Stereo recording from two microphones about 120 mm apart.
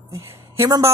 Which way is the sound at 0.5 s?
25° right (ahead or behind).